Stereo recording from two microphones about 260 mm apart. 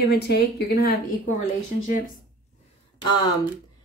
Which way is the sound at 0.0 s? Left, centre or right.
Left.